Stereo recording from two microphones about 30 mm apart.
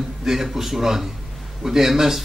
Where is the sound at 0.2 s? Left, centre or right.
Centre.